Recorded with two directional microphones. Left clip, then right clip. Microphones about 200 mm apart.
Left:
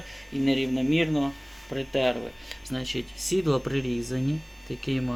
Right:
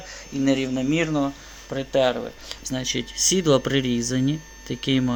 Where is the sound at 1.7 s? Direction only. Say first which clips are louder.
Right 5 dB; 10° right (ahead or behind).